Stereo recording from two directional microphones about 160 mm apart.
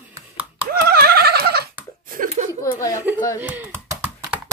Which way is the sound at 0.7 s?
75° right (ahead or behind).